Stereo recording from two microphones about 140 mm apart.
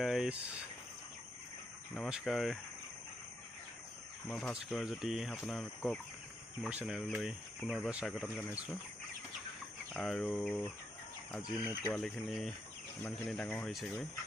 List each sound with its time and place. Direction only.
0.0 s cricket: centre (ahead or behind)
2.0 s speech: 5° right (ahead or behind)
4.3 s speech: 5° left (ahead or behind)
9.9 s speech: 5° left (ahead or behind)
11.8 s speech: 10° left (ahead or behind)